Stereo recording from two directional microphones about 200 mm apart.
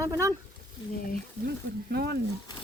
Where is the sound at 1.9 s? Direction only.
50° right (ahead or behind).